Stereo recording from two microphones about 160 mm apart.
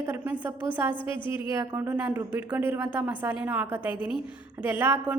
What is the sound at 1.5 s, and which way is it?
A woman's voice, 15° right (ahead or behind).